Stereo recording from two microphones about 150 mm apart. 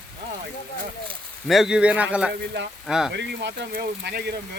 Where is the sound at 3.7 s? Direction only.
90° right.